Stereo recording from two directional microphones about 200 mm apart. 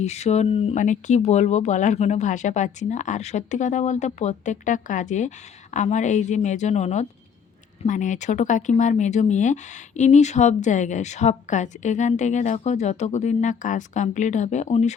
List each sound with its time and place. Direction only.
0.0 s speech: 35° left (ahead or behind)